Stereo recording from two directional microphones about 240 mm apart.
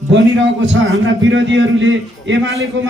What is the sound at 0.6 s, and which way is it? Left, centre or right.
A man's voice, right.